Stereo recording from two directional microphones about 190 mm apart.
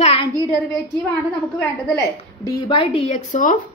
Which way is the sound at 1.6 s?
15° left (ahead or behind).